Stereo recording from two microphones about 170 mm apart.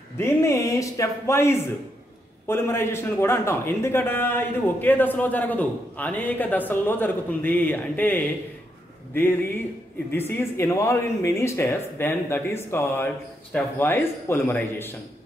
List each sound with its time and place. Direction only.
0.2 s a man's voice: 15° left (ahead or behind)
10.1 s a man's voice: 10° left (ahead or behind)